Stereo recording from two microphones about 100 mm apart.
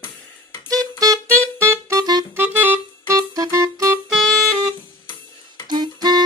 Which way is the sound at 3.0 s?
35° right (ahead or behind).